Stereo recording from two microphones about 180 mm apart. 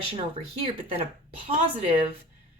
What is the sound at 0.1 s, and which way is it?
Speech, 30° right (ahead or behind).